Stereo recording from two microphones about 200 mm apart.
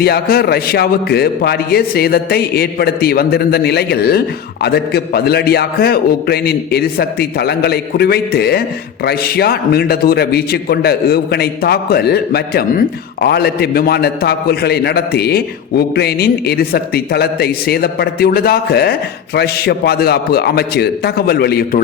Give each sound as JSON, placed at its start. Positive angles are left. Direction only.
{"t": 0.0, "sound": "a man's voice", "side_deg": 50}